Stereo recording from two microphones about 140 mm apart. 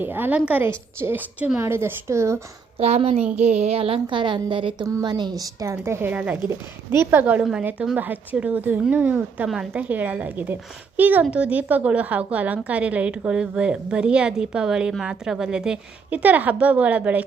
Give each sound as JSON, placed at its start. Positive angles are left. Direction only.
{"t": 0.0, "sound": "a woman's voice", "side_deg": -15}
{"t": 2.7, "sound": "a woman's voice", "side_deg": -45}
{"t": 4.9, "sound": "a woman's voice", "side_deg": -20}